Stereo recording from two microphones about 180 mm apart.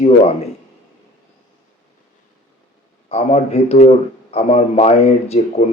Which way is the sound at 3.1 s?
35° left (ahead or behind).